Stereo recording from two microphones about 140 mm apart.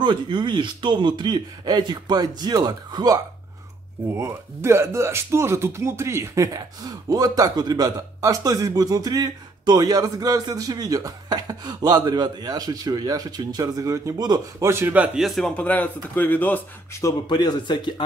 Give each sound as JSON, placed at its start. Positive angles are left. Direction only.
{"t": 0.0, "sound": "speech", "side_deg": -35}
{"t": 17.3, "sound": "speech", "side_deg": 30}